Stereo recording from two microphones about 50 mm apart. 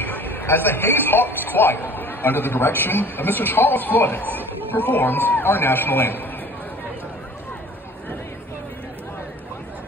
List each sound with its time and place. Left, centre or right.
0.0 s a man's voice: left